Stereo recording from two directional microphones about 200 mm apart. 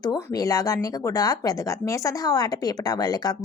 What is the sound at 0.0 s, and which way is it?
Speech, 20° left (ahead or behind).